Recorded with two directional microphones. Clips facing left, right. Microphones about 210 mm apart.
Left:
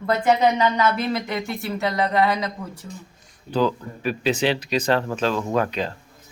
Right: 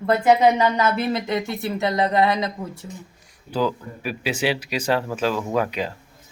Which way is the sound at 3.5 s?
10° right (ahead or behind).